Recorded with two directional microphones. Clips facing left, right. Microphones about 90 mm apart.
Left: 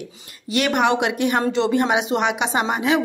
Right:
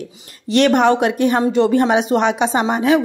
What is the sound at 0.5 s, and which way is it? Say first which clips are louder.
A woman's voice: right 6 dB; 40° right (ahead or behind).